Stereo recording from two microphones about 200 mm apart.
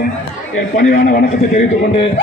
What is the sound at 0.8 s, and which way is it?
Speech, 50° left (ahead or behind).